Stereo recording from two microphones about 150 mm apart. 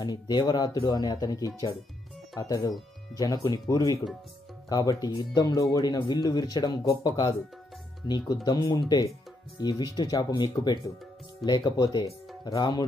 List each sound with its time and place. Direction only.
0.0 s speech: 25° left (ahead or behind)
8.5 s speech: 30° left (ahead or behind)